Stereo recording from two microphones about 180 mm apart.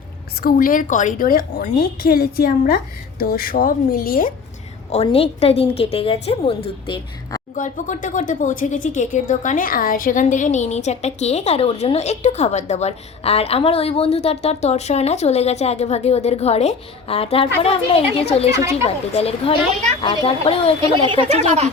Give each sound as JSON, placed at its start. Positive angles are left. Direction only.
{"t": 0.4, "sound": "a woman's voice", "side_deg": 50}
{"t": 4.9, "sound": "a woman's voice", "side_deg": 35}
{"t": 7.5, "sound": "a woman's voice", "side_deg": 45}
{"t": 21.1, "sound": "speech", "side_deg": -35}